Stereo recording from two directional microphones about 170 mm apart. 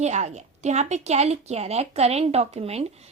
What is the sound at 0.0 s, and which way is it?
A woman's voice, 40° right (ahead or behind).